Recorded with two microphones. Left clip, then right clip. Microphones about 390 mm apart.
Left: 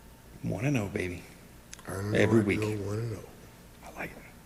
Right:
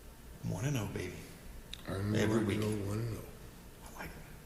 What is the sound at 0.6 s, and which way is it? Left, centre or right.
Speech, right.